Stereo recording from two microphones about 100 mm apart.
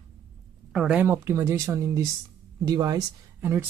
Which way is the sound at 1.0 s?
25° right (ahead or behind).